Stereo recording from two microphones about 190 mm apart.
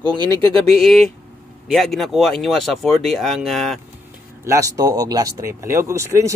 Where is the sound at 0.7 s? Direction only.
5° left (ahead or behind).